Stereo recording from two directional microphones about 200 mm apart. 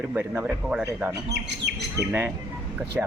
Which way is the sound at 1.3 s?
55° right (ahead or behind).